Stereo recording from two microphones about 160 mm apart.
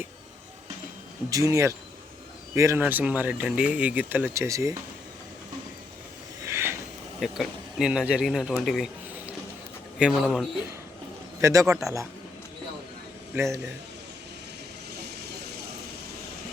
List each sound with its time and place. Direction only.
1.3 s speech: 20° right (ahead or behind)
6.4 s a sound: 15° right (ahead or behind)
7.2 s speech: centre (ahead or behind)
11.3 s a man's voice: 20° right (ahead or behind)
13.3 s speech: 20° right (ahead or behind)